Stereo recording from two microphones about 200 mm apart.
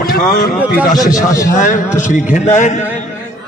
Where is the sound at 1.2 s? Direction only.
15° left (ahead or behind).